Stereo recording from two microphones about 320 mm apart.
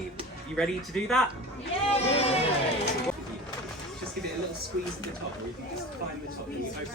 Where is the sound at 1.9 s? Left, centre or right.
Centre.